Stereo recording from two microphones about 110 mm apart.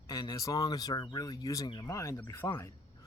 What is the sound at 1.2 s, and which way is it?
Speech, 30° left (ahead or behind).